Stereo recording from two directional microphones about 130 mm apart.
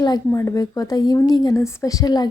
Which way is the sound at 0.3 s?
20° left (ahead or behind).